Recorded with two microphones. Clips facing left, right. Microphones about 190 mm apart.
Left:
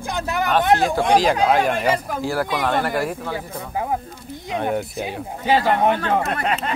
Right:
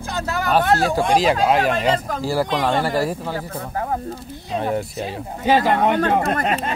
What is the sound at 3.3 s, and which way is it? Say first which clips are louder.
Speech: right 1 dB; 10° left (ahead or behind).